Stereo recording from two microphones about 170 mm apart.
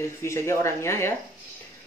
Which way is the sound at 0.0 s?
15° left (ahead or behind).